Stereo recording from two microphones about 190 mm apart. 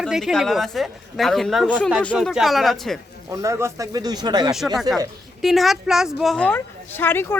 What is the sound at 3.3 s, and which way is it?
Speech, 15° right (ahead or behind).